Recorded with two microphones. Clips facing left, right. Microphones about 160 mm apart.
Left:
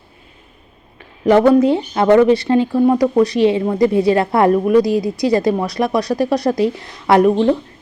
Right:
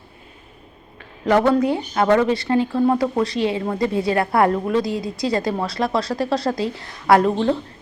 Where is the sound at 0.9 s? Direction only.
20° left (ahead or behind).